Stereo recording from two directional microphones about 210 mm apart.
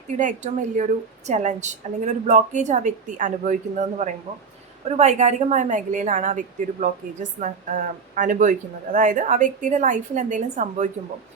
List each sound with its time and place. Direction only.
0.2 s a woman's voice: 35° right (ahead or behind)